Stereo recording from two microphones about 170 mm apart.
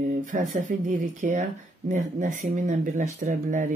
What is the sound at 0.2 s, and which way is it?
Speech, 50° right (ahead or behind).